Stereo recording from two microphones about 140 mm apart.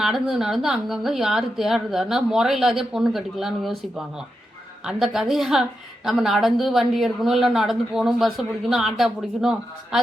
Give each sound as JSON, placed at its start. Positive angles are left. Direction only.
{"t": 0.0, "sound": "speech", "side_deg": 0}